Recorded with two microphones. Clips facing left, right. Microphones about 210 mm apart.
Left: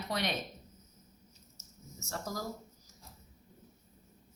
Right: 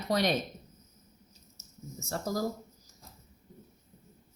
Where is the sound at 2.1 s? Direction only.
35° right (ahead or behind).